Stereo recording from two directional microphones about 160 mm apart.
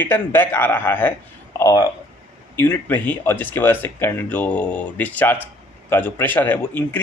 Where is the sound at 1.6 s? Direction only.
25° left (ahead or behind).